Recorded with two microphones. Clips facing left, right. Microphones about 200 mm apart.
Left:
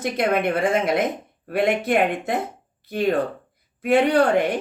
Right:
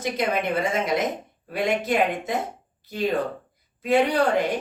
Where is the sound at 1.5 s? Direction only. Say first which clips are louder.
Left 4 dB; 55° left (ahead or behind).